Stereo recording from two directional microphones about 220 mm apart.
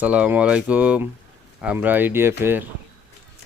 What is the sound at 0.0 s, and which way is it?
Speech, 5° right (ahead or behind).